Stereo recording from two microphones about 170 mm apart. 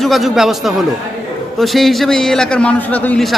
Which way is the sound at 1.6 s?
Centre (ahead or behind).